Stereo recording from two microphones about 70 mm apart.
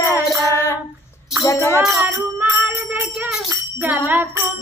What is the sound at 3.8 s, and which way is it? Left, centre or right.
Bicycle bell, right.